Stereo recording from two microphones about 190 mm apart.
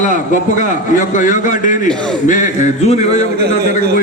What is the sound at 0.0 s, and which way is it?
A man's voice, 40° left (ahead or behind).